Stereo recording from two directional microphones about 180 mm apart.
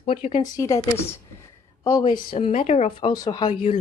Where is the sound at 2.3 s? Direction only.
40° left (ahead or behind).